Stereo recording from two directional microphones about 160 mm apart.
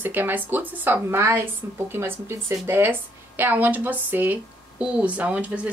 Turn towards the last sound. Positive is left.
turn(degrees=-10)  # may be behind; listen again after turning